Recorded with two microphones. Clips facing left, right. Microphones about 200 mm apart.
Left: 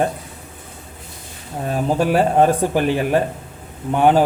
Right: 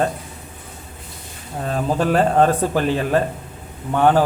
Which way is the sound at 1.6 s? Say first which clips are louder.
Left 1 dB; 15° left (ahead or behind).